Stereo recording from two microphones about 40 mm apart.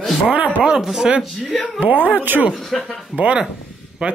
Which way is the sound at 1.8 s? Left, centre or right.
Right.